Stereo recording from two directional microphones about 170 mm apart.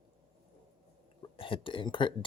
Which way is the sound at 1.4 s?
30° left (ahead or behind).